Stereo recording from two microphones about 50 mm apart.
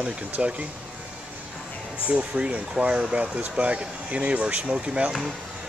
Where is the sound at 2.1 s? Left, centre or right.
Right.